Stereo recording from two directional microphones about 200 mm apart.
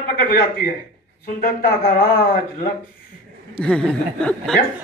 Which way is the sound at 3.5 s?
5° left (ahead or behind).